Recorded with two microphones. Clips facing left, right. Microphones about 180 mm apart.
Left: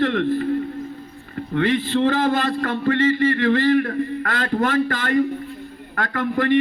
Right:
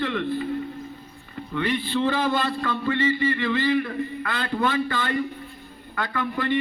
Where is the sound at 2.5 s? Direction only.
45° left (ahead or behind).